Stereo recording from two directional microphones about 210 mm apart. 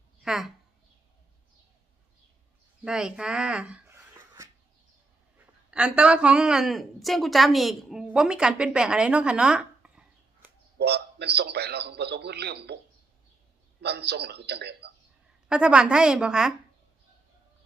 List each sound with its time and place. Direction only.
0.2 s a woman's voice: centre (ahead or behind)
2.8 s a sound: 5° right (ahead or behind)
5.7 s a woman's voice: 5° right (ahead or behind)
10.8 s a man's voice: 50° right (ahead or behind)
13.8 s a man's voice: 50° right (ahead or behind)
15.4 s a woman's voice: 5° right (ahead or behind)